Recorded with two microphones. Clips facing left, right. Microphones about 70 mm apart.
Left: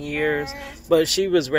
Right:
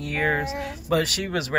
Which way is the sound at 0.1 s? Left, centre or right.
Right.